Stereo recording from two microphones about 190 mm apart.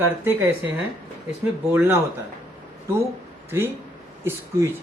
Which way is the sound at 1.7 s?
10° right (ahead or behind).